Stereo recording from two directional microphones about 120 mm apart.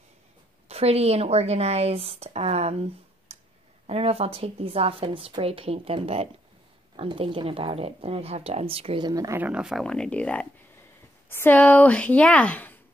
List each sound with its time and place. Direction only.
0.7 s speech: 60° right (ahead or behind)
9.0 s speech: 30° right (ahead or behind)
9.4 s speech: 10° right (ahead or behind)
9.8 s speech: 10° left (ahead or behind)